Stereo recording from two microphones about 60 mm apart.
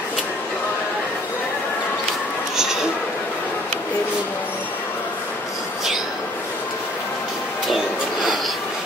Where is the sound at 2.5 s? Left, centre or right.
Centre.